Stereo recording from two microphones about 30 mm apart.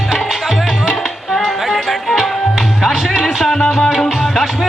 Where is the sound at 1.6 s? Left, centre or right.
Centre.